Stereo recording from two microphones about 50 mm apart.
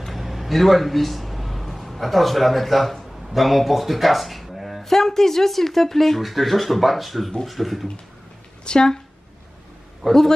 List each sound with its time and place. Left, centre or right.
0.0 s a sound: centre
3.1 s speech: centre
8.6 s speech: centre
10.0 s speech: centre